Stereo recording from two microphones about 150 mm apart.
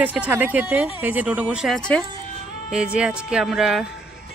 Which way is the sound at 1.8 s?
5° left (ahead or behind).